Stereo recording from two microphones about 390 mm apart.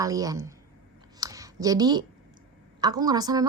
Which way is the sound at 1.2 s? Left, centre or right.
Centre.